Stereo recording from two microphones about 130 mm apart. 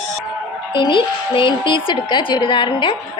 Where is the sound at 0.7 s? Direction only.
40° left (ahead or behind).